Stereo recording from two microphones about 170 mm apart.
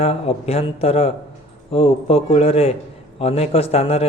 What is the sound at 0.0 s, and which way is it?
A man's voice, 35° left (ahead or behind).